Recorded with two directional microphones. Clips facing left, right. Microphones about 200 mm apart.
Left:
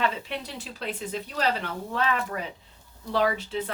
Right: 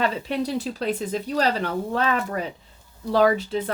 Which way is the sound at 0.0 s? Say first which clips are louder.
Right 5 dB; 40° right (ahead or behind).